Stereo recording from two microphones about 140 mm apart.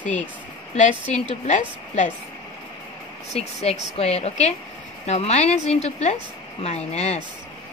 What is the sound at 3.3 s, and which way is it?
A woman's voice, 50° left (ahead or behind).